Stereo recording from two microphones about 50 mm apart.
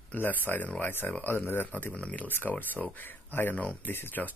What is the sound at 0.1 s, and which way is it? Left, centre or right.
Speech, left.